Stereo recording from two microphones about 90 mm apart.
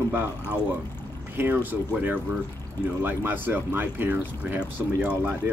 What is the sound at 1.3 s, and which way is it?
Speech, 25° right (ahead or behind).